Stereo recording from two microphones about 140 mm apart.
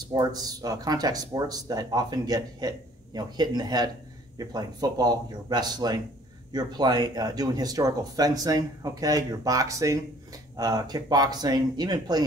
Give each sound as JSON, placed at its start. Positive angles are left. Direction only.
{"t": 0.1, "sound": "speech", "side_deg": -25}